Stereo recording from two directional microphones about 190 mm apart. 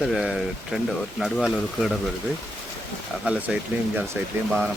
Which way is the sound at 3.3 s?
5° right (ahead or behind).